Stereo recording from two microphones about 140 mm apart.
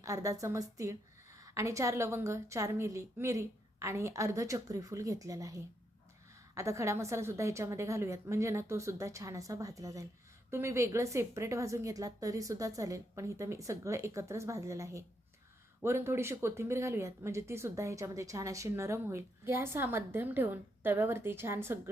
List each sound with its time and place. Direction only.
0.0 s speech: 25° right (ahead or behind)